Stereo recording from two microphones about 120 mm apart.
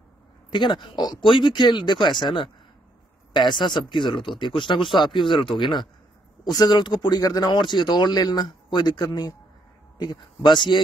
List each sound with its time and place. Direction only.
0.5 s speech: 40° left (ahead or behind)